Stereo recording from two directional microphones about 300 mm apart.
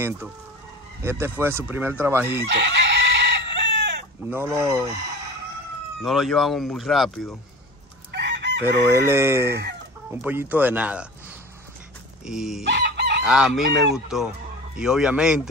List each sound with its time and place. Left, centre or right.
1.0 s speech: centre
2.7 s chicken: right
4.3 s speech: centre
6.0 s speech: centre
8.1 s chicken: right
8.9 s speech: centre
9.5 s speech: right
10.1 s speech: centre
12.3 s speech: centre
12.6 s chicken: right
13.2 s speech: centre